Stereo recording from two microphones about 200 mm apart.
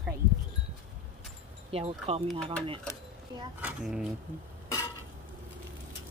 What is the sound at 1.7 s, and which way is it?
Speech, 30° right (ahead or behind).